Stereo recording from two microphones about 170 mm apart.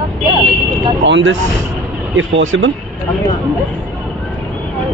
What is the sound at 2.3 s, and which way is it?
Speech, 90° right.